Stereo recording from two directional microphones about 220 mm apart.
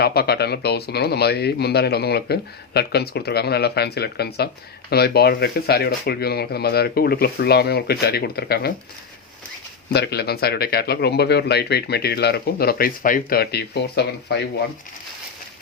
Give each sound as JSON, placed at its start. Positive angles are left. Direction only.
{"t": 0.0, "sound": "speech", "side_deg": 45}
{"t": 9.9, "sound": "speech", "side_deg": 50}